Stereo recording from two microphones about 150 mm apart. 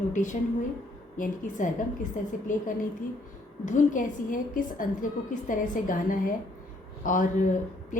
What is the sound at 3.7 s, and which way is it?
A woman's voice, 60° left (ahead or behind).